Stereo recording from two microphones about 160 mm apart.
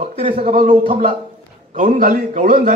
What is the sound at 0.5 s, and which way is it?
A man's voice, 50° right (ahead or behind).